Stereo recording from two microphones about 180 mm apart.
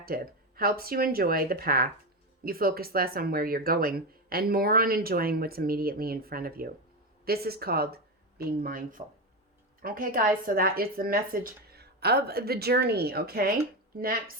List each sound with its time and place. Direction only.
0.0 s speech: 55° right (ahead or behind)